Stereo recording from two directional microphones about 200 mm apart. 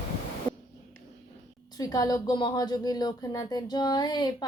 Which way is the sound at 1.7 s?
20° left (ahead or behind).